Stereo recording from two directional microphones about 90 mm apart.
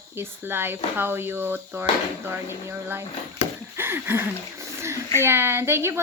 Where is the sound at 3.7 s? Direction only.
25° right (ahead or behind).